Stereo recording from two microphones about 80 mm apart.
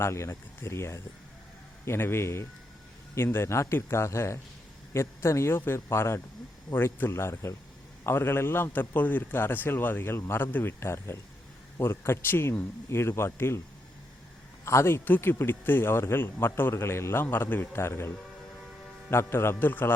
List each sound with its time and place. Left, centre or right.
0.0 s a man's voice: left
14.6 s speech: left
19.1 s a man's voice: left